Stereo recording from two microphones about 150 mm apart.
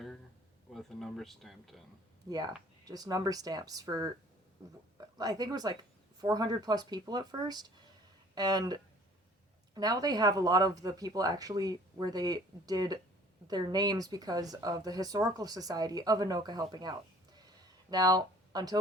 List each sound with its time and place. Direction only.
0.7 s speech: centre (ahead or behind)
2.8 s speech: 25° right (ahead or behind)